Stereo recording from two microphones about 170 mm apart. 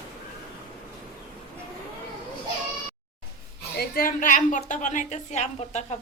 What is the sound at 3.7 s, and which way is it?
A woman's voice, 65° left (ahead or behind).